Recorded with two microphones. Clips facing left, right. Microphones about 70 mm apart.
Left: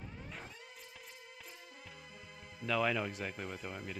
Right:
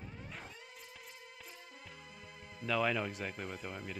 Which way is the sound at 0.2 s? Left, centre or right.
Centre.